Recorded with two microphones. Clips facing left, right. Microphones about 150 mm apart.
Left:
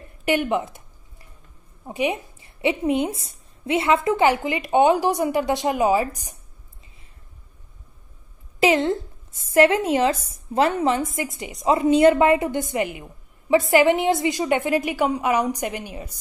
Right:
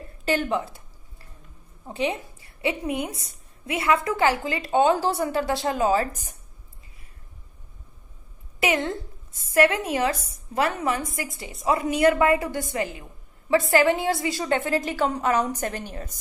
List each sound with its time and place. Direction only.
0.2 s speech: 15° left (ahead or behind)
1.9 s a woman's voice: 15° left (ahead or behind)
8.5 s a woman's voice: 25° left (ahead or behind)